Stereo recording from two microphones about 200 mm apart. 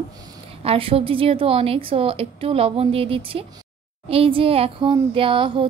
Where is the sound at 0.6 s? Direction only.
30° right (ahead or behind).